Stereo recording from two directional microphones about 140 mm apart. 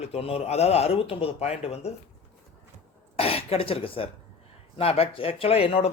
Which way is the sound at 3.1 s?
45° left (ahead or behind).